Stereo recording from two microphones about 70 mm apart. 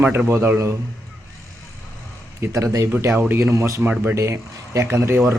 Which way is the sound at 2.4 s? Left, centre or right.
Right.